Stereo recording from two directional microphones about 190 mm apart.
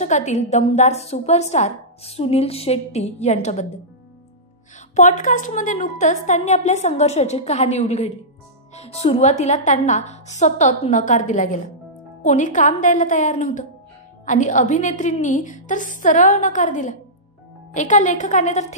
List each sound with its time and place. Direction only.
0.0 s a woman's voice: 40° left (ahead or behind)
4.9 s a woman's voice: 40° left (ahead or behind)